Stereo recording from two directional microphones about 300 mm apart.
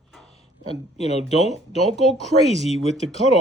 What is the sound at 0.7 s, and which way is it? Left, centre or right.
Speech, left.